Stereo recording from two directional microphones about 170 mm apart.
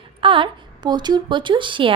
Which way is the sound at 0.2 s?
30° right (ahead or behind).